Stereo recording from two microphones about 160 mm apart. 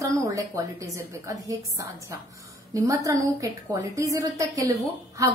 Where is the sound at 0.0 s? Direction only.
20° right (ahead or behind).